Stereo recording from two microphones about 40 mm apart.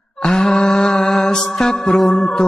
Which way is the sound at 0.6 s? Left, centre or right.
Centre.